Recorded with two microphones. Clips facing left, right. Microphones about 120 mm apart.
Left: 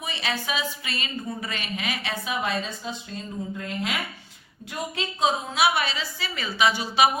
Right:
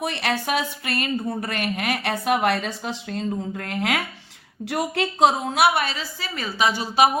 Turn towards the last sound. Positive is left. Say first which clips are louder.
# right 2 dB
turn(degrees=-40)  # may be behind; listen again after turning